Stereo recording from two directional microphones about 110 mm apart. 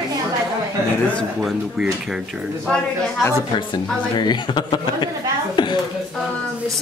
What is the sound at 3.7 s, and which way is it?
A woman's voice, 40° left (ahead or behind).